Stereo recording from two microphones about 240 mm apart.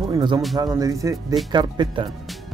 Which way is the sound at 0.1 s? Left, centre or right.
Centre.